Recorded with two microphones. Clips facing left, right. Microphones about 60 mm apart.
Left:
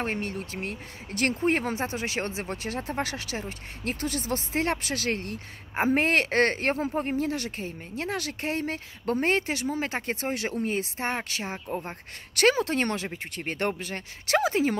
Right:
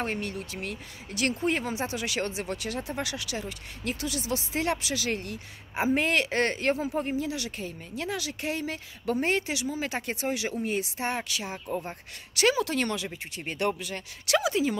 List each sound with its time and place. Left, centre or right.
0.0 s speech: left